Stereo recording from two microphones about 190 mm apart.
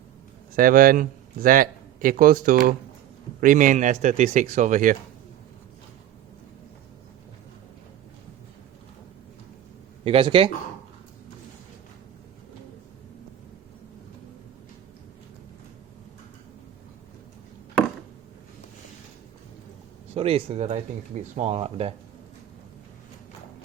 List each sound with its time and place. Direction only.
0.5 s a man's voice: 45° right (ahead or behind)
10.0 s speech: 30° right (ahead or behind)
20.1 s speech: 30° right (ahead or behind)